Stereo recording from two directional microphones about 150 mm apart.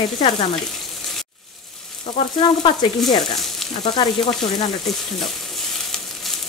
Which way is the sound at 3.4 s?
Centre (ahead or behind).